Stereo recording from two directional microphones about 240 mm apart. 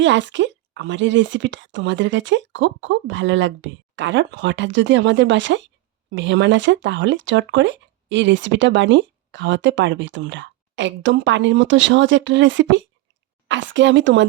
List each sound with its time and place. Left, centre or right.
0.0 s speech: right